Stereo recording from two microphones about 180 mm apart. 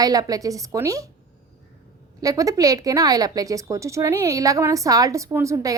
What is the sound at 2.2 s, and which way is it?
A woman's voice, 20° right (ahead or behind).